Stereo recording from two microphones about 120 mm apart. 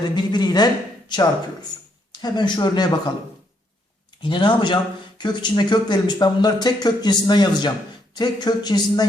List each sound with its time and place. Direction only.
0.0 s speech: 35° left (ahead or behind)
4.2 s speech: 40° left (ahead or behind)